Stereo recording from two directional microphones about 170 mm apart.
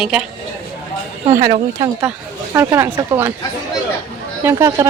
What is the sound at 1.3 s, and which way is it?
Speech, 45° right (ahead or behind).